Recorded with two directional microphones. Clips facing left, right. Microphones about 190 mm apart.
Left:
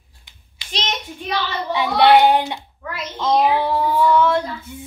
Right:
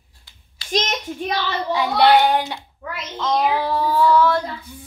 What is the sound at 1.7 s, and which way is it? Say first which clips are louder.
Speech: left 2 dB; 25° left (ahead or behind).